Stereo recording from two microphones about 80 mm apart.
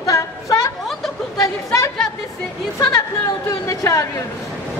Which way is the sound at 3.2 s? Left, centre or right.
Left.